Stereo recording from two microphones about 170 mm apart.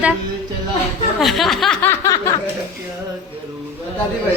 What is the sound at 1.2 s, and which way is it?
Snicker, centre (ahead or behind).